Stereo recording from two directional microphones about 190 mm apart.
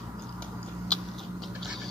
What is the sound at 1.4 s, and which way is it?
Rodents, centre (ahead or behind).